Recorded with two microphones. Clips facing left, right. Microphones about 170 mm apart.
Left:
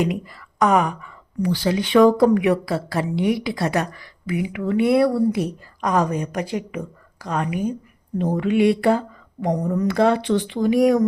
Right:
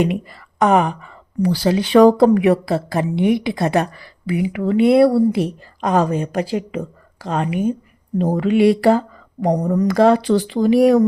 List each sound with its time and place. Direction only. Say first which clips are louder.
0.3 s speech: right 3 dB; 25° right (ahead or behind)